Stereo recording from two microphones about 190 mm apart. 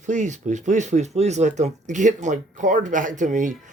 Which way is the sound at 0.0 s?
40° right (ahead or behind).